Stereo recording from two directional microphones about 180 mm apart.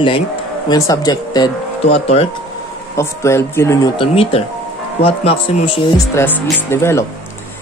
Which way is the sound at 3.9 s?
30° left (ahead or behind).